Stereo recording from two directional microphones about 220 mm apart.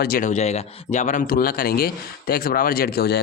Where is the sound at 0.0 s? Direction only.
40° left (ahead or behind).